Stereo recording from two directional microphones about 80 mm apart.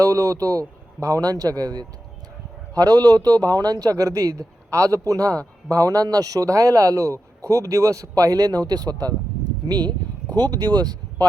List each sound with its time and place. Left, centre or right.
0.0 s speech: right